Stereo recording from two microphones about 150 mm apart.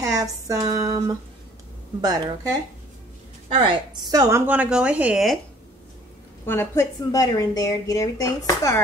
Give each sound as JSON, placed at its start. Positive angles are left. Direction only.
{"t": 0.0, "sound": "a sound", "side_deg": -20}
{"t": 2.0, "sound": "speech", "side_deg": -25}
{"t": 3.4, "sound": "a woman's voice", "side_deg": -35}
{"t": 4.1, "sound": "speech", "side_deg": -20}
{"t": 4.5, "sound": "speech", "side_deg": -10}
{"t": 6.4, "sound": "a woman's voice", "side_deg": 15}